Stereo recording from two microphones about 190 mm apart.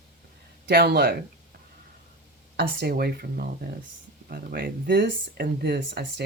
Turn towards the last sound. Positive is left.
turn(degrees=-60)  # may be behind; listen again after turning